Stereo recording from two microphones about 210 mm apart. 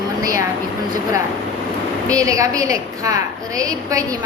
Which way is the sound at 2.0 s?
15° right (ahead or behind).